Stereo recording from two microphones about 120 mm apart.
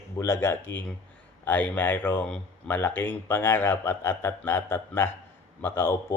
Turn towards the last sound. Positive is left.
turn(degrees=20)  # may be behind; listen again after turning